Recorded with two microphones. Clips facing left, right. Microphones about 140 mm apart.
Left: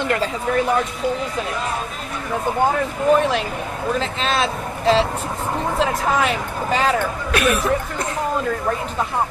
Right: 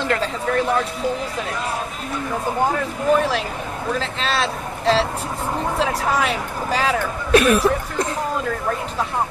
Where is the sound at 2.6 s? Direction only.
Centre (ahead or behind).